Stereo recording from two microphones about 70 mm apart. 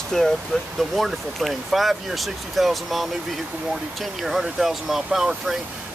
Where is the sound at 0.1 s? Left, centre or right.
Centre.